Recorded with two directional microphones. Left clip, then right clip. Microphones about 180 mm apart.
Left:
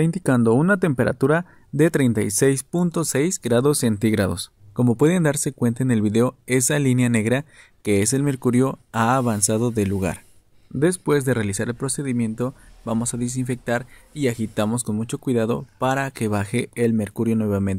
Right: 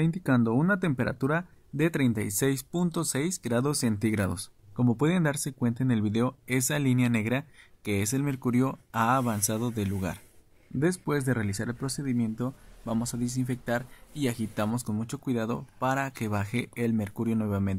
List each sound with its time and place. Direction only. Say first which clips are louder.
0.0 s speech: left 7 dB; 30° left (ahead or behind)
10.8 s speech: left 9 dB; 20° left (ahead or behind)